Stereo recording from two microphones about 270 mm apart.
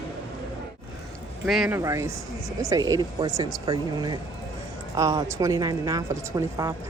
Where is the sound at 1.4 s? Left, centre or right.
Centre.